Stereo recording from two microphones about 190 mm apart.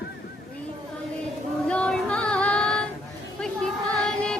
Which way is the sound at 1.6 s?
5° left (ahead or behind).